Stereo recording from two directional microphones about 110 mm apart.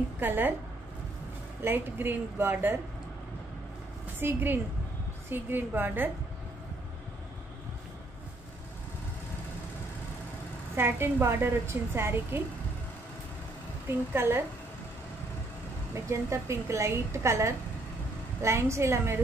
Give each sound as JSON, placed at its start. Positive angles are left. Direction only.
{"t": 0.2, "sound": "a woman's voice", "side_deg": -20}
{"t": 1.6, "sound": "a woman's voice", "side_deg": -20}
{"t": 4.2, "sound": "a woman's voice", "side_deg": -20}
{"t": 10.8, "sound": "a woman's voice", "side_deg": -20}
{"t": 13.8, "sound": "a woman's voice", "side_deg": -20}
{"t": 15.9, "sound": "a woman's voice", "side_deg": -25}